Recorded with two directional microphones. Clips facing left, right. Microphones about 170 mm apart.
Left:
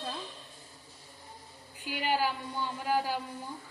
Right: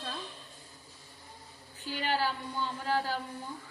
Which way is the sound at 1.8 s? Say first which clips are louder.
Left 1 dB; 10° left (ahead or behind).